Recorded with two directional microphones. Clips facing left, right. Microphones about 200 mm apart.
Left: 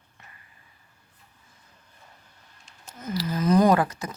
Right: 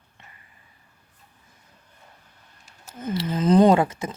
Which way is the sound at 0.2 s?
25° right (ahead or behind).